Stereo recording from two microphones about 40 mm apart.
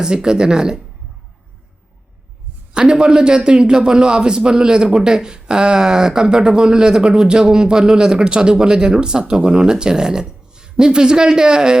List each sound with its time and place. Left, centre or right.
0.0 s a man's voice: centre
2.7 s a man's voice: centre